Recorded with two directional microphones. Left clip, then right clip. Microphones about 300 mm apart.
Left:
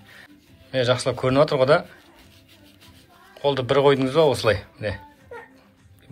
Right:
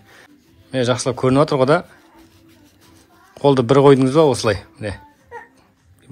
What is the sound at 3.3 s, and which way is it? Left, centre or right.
Speech, right.